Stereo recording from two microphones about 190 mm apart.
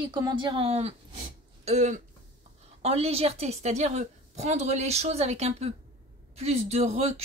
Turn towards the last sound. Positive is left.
turn(degrees=-35)  # may be behind; listen again after turning